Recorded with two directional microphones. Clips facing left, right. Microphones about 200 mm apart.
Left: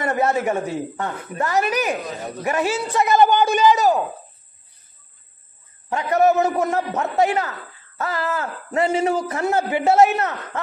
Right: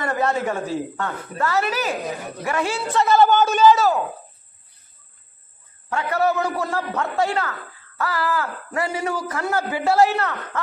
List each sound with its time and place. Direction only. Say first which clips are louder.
0.0 s a man's voice: left 2 dB; 20° left (ahead or behind)
5.9 s speech: left 4 dB; 20° left (ahead or behind)